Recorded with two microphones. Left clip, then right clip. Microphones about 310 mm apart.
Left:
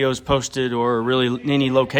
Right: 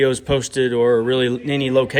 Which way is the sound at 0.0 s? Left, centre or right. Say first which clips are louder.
Right 2 dB; centre.